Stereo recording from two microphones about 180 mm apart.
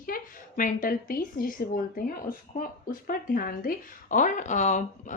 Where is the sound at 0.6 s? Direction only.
45° left (ahead or behind).